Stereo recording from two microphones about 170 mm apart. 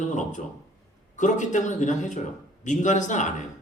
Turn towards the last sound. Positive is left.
turn(degrees=45)  # may be behind; listen again after turning